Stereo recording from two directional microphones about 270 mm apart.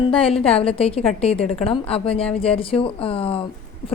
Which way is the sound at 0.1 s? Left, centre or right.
Left.